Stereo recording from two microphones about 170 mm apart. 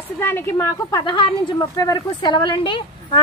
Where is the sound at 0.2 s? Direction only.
15° left (ahead or behind).